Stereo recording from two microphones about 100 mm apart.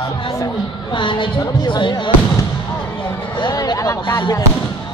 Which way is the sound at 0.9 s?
55° left (ahead or behind).